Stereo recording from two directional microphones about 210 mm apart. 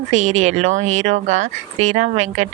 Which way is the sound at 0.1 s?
35° right (ahead or behind).